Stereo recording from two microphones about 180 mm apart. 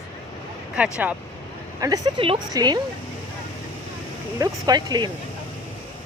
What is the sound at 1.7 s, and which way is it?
Speech, 20° right (ahead or behind).